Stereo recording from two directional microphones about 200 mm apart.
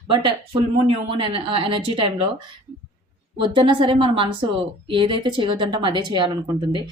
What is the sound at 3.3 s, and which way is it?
A woman's voice, 25° right (ahead or behind).